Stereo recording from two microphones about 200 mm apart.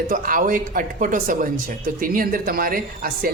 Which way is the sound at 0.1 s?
45° right (ahead or behind).